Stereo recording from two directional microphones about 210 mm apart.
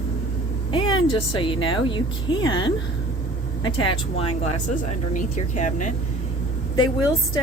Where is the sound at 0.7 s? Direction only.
25° left (ahead or behind).